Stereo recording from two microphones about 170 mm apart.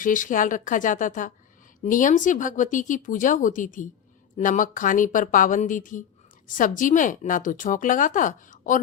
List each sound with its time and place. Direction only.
0.0 s speech: 50° left (ahead or behind)